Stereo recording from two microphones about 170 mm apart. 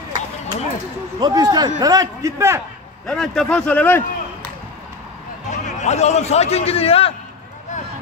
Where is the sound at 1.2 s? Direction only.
20° right (ahead or behind).